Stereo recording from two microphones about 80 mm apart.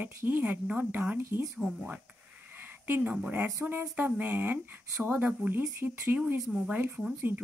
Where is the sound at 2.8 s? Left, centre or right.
Right.